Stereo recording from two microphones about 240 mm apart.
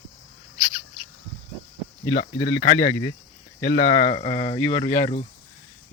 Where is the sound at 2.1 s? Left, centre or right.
Left.